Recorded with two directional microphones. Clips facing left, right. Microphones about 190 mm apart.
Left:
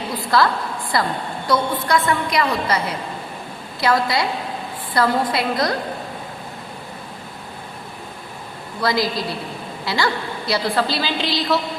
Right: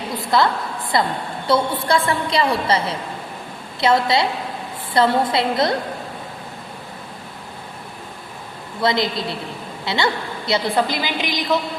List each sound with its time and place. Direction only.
0.3 s a woman's voice: 20° right (ahead or behind)
8.8 s a woman's voice: 25° right (ahead or behind)